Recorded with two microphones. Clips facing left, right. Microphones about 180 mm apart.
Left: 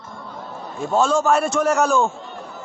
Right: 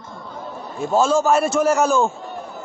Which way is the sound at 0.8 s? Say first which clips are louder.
Right 1 dB; centre (ahead or behind).